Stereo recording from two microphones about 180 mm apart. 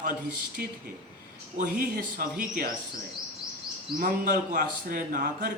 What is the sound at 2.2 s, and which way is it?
Speech, 55° right (ahead or behind).